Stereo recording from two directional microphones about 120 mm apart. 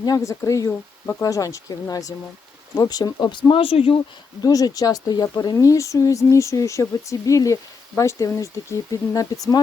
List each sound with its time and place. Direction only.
0.0 s speech: 30° left (ahead or behind); by 4.0 s 50° left (ahead or behind)
4.4 s speech: 30° left (ahead or behind)